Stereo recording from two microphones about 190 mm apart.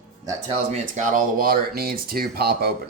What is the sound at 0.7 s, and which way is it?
Speech, 40° right (ahead or behind).